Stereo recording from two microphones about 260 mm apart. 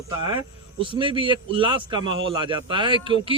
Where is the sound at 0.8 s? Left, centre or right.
Centre.